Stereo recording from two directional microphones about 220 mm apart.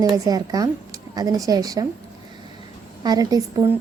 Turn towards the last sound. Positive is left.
turn(degrees=-15)  # may be behind; listen again after turning